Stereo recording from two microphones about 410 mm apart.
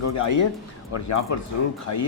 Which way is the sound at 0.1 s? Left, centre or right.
Left.